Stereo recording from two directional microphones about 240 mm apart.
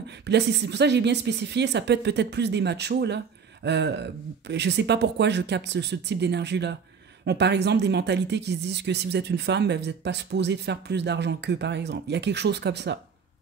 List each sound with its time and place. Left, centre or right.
0.1 s speech: right